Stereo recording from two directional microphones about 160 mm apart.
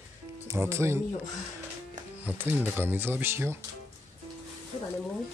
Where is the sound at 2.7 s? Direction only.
15° right (ahead or behind).